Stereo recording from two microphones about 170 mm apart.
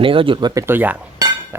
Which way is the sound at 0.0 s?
30° right (ahead or behind).